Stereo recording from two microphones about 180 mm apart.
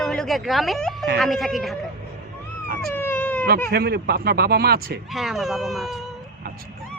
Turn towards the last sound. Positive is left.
turn(degrees=0)  # may be behind; listen again after turning